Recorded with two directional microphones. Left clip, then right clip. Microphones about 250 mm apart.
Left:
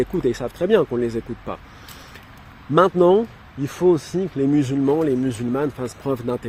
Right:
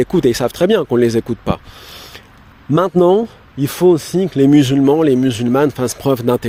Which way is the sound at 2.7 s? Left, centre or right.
Right.